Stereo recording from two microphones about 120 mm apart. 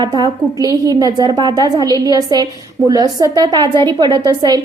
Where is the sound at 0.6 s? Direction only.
30° right (ahead or behind).